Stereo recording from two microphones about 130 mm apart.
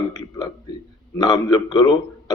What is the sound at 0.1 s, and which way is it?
A man's voice, 30° left (ahead or behind).